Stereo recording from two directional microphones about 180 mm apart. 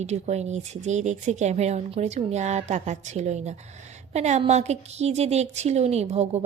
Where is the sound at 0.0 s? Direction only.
40° right (ahead or behind).